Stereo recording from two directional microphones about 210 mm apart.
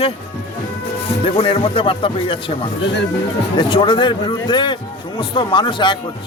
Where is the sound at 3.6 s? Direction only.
25° left (ahead or behind).